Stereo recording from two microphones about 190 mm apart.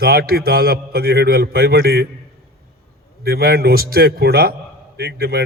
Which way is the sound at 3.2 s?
55° right (ahead or behind).